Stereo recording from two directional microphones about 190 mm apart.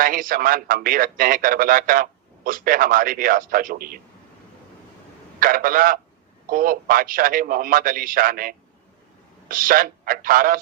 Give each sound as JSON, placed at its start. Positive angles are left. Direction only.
{"t": 0.0, "sound": "a man's voice", "side_deg": -45}
{"t": 5.4, "sound": "a man's voice", "side_deg": -50}